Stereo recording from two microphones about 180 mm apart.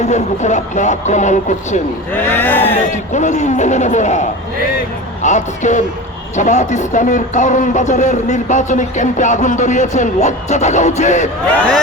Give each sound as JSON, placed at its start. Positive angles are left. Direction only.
{"t": 0.0, "sound": "speech", "side_deg": 40}
{"t": 2.1, "sound": "speech", "side_deg": 10}
{"t": 2.9, "sound": "speech", "side_deg": 40}